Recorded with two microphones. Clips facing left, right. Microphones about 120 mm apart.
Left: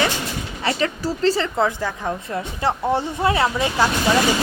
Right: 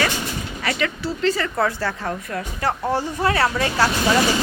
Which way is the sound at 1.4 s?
20° left (ahead or behind).